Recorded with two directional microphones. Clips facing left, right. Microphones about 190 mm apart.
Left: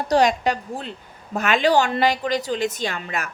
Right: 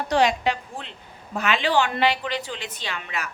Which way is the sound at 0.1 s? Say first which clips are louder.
Left 3 dB; 40° left (ahead or behind).